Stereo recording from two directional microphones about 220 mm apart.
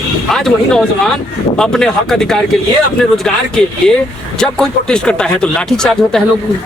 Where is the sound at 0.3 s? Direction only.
Centre (ahead or behind).